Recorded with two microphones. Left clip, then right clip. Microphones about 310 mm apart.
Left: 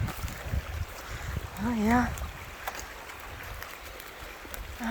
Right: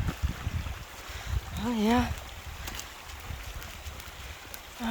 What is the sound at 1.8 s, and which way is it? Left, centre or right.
Speech, centre.